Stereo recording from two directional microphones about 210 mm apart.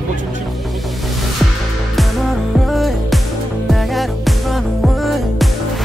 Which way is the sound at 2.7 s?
Centre (ahead or behind).